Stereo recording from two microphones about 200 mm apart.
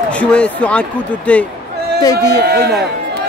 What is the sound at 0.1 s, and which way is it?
Speech, 5° left (ahead or behind).